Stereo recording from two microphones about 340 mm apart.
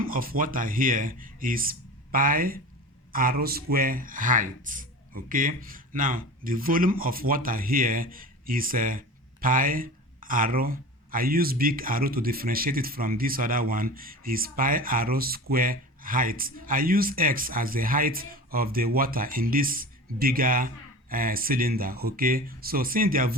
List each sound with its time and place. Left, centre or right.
0.0 s speech: right